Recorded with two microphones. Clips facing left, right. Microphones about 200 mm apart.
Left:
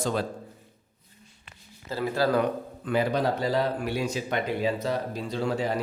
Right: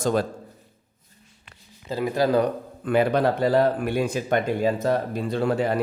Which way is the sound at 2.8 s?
60° right (ahead or behind).